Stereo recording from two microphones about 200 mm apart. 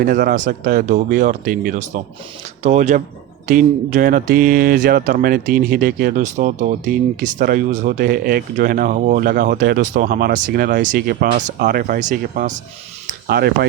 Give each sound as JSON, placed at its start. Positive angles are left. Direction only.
{"t": 0.0, "sound": "speech", "side_deg": -45}
{"t": 13.1, "sound": "speech", "side_deg": -50}